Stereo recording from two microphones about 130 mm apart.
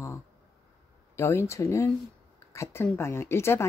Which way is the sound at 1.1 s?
20° left (ahead or behind).